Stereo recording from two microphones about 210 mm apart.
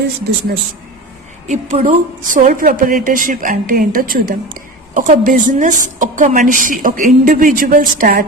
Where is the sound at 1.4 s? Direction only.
35° right (ahead or behind).